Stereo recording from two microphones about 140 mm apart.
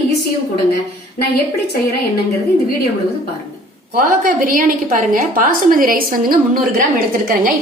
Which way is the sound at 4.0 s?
85° right.